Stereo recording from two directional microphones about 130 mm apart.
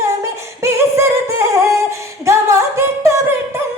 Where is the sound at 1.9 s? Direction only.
20° right (ahead or behind).